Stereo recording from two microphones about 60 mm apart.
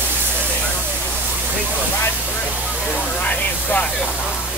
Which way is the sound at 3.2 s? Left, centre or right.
Left.